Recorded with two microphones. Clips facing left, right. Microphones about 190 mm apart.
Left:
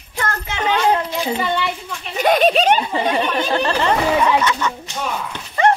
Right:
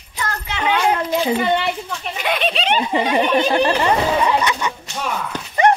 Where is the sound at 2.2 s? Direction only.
45° left (ahead or behind).